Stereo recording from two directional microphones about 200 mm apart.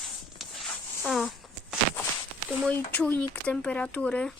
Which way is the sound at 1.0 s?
Centre (ahead or behind).